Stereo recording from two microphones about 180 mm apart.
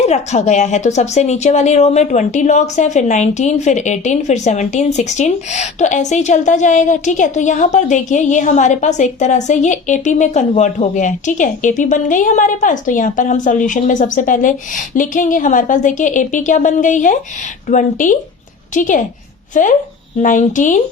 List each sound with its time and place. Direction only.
0.0 s a woman's voice: 40° left (ahead or behind)